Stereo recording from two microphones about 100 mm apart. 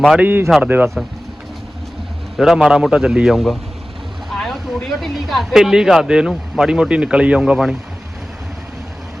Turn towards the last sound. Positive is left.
turn(degrees=-5)  # may be behind; listen again after turning